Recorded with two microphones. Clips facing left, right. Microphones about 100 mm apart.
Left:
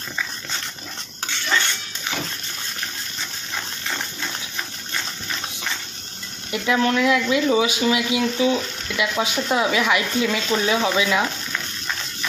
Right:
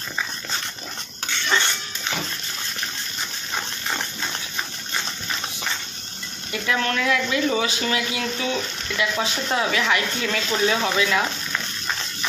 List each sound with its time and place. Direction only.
6.5 s speech: 20° left (ahead or behind)